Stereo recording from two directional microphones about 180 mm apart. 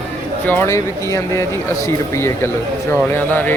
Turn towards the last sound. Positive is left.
turn(degrees=10)  # may be behind; listen again after turning